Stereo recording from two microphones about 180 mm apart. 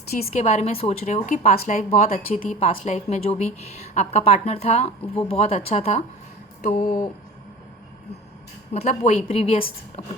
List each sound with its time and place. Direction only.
0.2 s a woman's voice: 40° left (ahead or behind)
6.6 s speech: 45° left (ahead or behind)
8.7 s a woman's voice: 35° left (ahead or behind)